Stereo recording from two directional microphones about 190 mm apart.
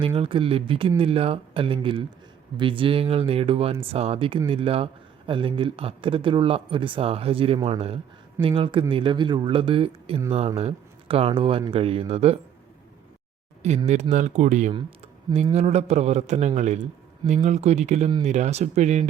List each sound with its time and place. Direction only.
0.0 s a man's voice: 25° right (ahead or behind)
13.6 s a man's voice: 35° right (ahead or behind)